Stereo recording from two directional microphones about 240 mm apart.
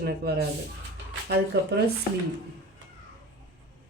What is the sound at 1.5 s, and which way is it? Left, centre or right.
Speech, right.